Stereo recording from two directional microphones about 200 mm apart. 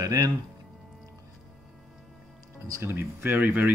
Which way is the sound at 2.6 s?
15° right (ahead or behind).